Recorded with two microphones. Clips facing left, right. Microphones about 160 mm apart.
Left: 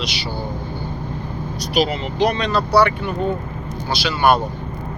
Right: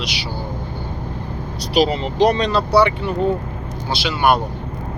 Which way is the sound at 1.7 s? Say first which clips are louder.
Right 3 dB; 35° right (ahead or behind).